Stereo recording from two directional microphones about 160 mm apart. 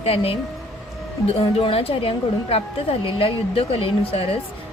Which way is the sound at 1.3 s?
35° left (ahead or behind).